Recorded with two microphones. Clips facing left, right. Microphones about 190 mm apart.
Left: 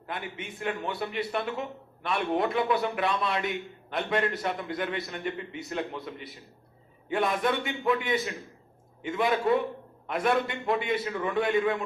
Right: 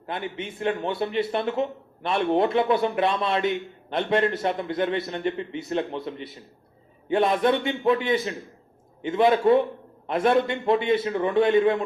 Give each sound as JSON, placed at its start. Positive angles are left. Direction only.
{"t": 0.1, "sound": "a man's voice", "side_deg": -25}